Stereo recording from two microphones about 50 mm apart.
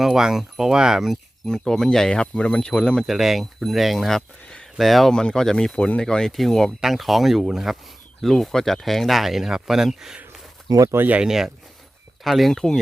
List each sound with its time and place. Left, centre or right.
0.0 s speech: centre
1.5 s speech: centre
3.1 s speech: centre
5.1 s speech: centre
6.3 s speech: centre
6.8 s speech: centre
11.2 s speech: centre
12.2 s speech: centre